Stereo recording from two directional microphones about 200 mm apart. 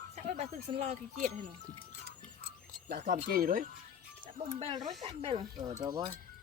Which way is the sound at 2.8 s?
45° right (ahead or behind).